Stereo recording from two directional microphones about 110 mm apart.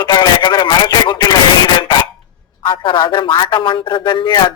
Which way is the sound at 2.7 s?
50° left (ahead or behind).